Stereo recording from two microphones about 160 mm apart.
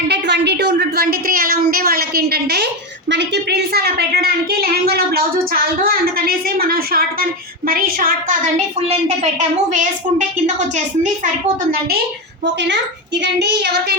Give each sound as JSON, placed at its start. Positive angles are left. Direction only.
{"t": 0.1, "sound": "a woman's voice", "side_deg": -90}
{"t": 5.8, "sound": "a sound", "side_deg": -70}
{"t": 7.7, "sound": "a woman's voice", "side_deg": -60}
{"t": 8.9, "sound": "a child's voice", "side_deg": -45}
{"t": 13.2, "sound": "child singing", "side_deg": -90}